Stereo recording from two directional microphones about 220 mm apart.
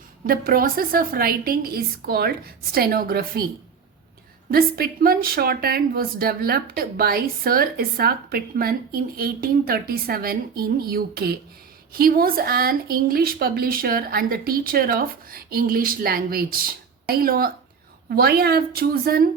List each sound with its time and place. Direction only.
0.3 s speech: 40° right (ahead or behind)
4.5 s speech: 40° right (ahead or behind)